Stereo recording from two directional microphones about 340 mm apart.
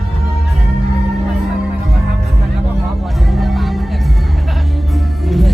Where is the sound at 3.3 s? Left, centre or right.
Centre.